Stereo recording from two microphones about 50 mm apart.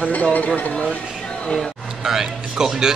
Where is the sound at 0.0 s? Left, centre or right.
Left.